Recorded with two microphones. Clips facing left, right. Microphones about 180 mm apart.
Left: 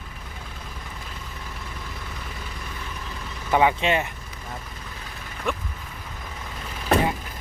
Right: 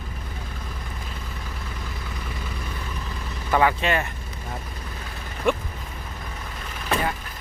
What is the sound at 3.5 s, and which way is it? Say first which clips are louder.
Speech: left 1 dB; 20° left (ahead or behind).